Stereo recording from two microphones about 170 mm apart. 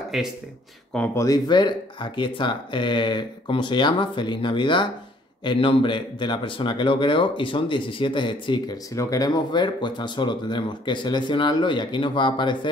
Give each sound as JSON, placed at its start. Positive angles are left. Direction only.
{"t": 0.1, "sound": "speech", "side_deg": 0}
{"t": 1.2, "sound": "speech", "side_deg": 25}